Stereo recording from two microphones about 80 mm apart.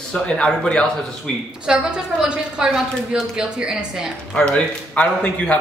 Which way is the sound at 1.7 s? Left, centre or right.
Centre.